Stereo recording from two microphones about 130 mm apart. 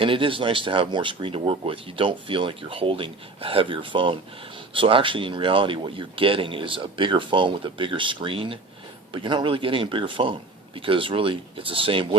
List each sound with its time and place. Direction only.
0.0 s speech: 40° right (ahead or behind)